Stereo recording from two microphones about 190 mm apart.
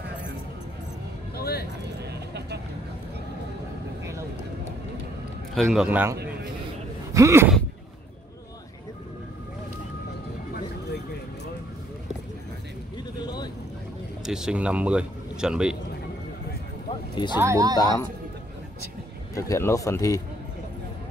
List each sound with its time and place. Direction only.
1.3 s a sound: 55° left (ahead or behind)
2.0 s vehicle: 60° right (ahead or behind)
5.5 s a man's voice: centre (ahead or behind)
7.2 s speech: 15° right (ahead or behind)
12.9 s a sound: 20° left (ahead or behind)
14.2 s speech: 5° right (ahead or behind)
17.4 s speech: 15° right (ahead or behind)
17.7 s speech: 20° left (ahead or behind)
19.3 s speech: 15° left (ahead or behind)